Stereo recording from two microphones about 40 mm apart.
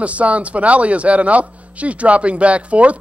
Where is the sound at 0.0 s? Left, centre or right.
Right.